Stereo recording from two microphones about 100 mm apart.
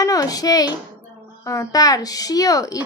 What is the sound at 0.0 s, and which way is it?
A child's voice, 35° left (ahead or behind).